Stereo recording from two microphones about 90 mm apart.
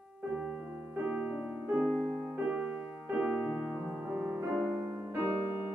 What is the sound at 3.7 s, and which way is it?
Music, 20° right (ahead or behind).